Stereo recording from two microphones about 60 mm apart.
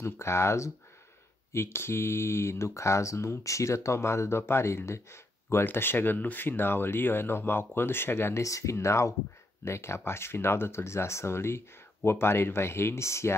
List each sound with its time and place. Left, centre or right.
0.0 s speech: left
8.4 s speech: left